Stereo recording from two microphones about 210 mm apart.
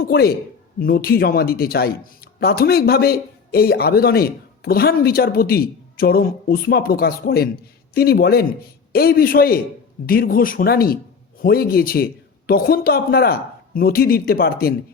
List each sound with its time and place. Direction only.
0.0 s speech: 45° left (ahead or behind)